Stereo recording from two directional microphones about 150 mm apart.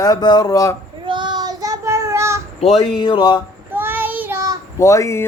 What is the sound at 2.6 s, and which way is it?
Speech, 40° left (ahead or behind).